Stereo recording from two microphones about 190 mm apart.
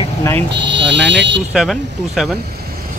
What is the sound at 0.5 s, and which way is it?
Speech, 70° right (ahead or behind).